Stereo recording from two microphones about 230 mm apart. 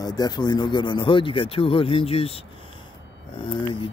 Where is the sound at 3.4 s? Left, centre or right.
Left.